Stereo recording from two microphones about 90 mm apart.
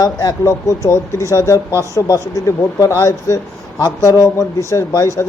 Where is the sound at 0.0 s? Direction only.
40° left (ahead or behind).